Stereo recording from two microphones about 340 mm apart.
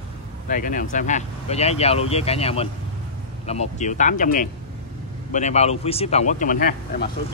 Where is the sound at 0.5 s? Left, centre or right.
Left.